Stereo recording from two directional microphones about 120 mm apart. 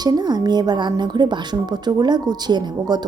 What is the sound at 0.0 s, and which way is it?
Speech, 35° right (ahead or behind).